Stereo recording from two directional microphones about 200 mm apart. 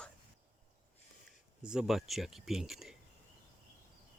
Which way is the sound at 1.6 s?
5° right (ahead or behind).